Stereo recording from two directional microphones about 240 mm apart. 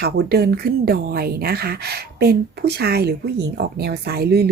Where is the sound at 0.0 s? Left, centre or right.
Right.